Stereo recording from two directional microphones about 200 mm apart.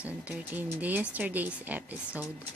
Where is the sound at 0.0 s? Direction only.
5° right (ahead or behind).